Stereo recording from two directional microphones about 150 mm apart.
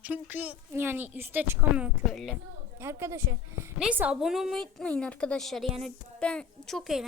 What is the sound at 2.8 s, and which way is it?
A woman's voice, 15° right (ahead or behind).